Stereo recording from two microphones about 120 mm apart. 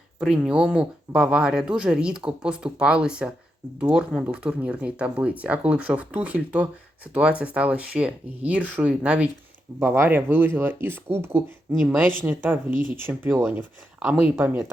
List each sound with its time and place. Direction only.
0.2 s speech: 5° right (ahead or behind)